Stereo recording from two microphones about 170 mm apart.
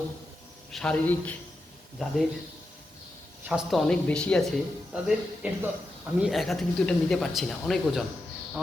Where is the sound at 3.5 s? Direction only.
Centre (ahead or behind).